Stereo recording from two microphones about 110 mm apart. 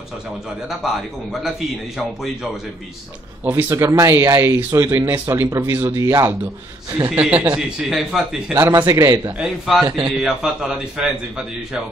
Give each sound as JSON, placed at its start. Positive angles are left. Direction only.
{"t": 0.7, "sound": "a man's voice", "side_deg": -5}
{"t": 3.4, "sound": "speech", "side_deg": -20}
{"t": 3.7, "sound": "speech", "side_deg": -30}
{"t": 7.1, "sound": "speech", "side_deg": -15}
{"t": 7.5, "sound": "a man's voice", "side_deg": -5}
{"t": 8.5, "sound": "speech", "side_deg": -30}
{"t": 9.4, "sound": "a man's voice", "side_deg": -5}